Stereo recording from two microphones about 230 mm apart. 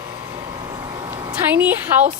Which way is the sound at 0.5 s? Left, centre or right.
Centre.